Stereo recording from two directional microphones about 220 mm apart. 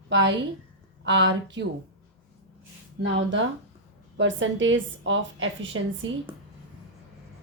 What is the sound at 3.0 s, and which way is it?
A woman's voice, 55° right (ahead or behind).